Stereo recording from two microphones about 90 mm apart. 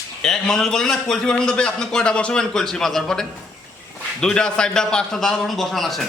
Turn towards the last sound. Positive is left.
turn(degrees=0)  # may be behind; listen again after turning